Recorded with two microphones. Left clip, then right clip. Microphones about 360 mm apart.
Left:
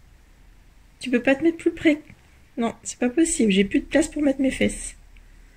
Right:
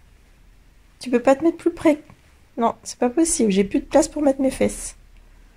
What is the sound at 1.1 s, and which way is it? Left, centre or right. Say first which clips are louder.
Speech: right 3 dB; right.